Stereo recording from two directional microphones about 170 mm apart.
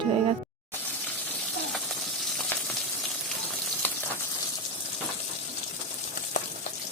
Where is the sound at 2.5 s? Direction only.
10° left (ahead or behind).